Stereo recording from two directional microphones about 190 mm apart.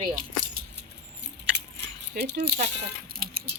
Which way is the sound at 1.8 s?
60° right (ahead or behind).